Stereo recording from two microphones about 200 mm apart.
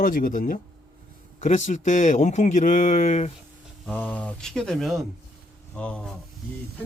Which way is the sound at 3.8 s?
10° left (ahead or behind).